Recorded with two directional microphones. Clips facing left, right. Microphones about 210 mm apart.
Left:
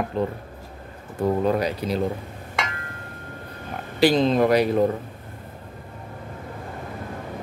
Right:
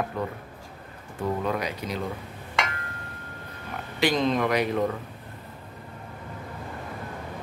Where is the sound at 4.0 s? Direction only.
30° left (ahead or behind).